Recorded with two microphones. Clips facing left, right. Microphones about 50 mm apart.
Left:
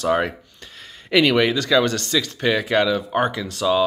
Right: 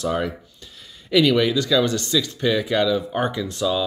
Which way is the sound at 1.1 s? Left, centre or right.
Left.